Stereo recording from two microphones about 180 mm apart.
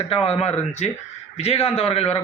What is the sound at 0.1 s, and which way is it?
A man's voice, 35° left (ahead or behind).